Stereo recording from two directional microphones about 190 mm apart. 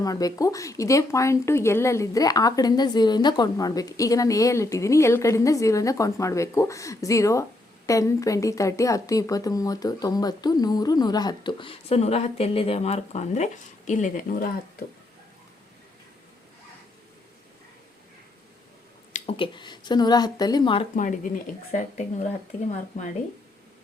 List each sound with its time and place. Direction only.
0.0 s a woman's voice: 20° left (ahead or behind); by 14.6 s 45° left (ahead or behind)
19.1 s a woman's voice: 30° left (ahead or behind)
20.9 s a woman's voice: 45° left (ahead or behind)